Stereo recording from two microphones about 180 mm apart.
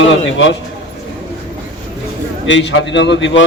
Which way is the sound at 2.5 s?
85° left.